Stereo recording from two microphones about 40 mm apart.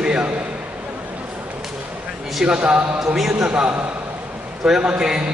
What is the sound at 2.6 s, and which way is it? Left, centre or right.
A man's voice, right.